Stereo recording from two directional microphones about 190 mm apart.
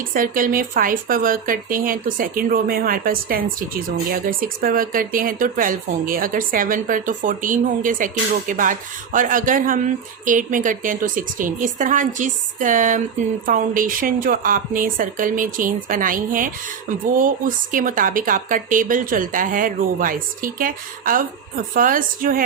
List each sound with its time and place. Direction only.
0.1 s speech: 45° right (ahead or behind)